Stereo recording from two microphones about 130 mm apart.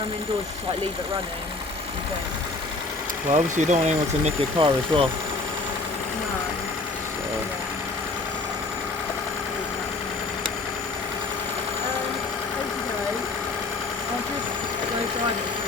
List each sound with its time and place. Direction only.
3.3 s speech: 65° right (ahead or behind)
4.5 s speech: 35° right (ahead or behind)